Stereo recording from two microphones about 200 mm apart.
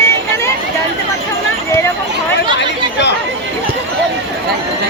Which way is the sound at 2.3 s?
60° left (ahead or behind).